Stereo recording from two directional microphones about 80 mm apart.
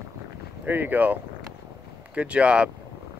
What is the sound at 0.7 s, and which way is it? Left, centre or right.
Speech, right.